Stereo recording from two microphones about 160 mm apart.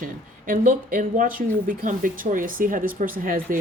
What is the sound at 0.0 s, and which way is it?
Speech, 60° right (ahead or behind).